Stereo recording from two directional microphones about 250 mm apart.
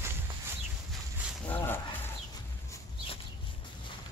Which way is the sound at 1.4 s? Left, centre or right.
Centre.